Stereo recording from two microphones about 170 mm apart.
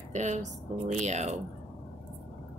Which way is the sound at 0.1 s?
45° right (ahead or behind).